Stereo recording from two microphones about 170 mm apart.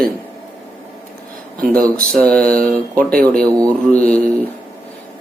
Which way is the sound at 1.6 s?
55° right (ahead or behind).